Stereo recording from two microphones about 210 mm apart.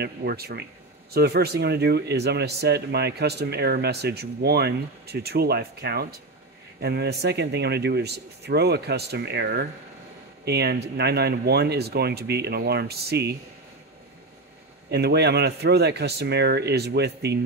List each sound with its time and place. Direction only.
0.0 s speech: 50° right (ahead or behind)
14.9 s speech: 50° right (ahead or behind)